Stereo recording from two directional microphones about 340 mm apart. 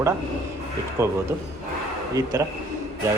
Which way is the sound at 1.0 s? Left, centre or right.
Centre.